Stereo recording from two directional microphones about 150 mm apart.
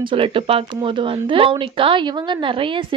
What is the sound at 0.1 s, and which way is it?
Speech, 35° right (ahead or behind).